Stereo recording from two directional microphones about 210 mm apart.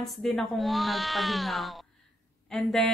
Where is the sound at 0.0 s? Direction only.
Centre (ahead or behind).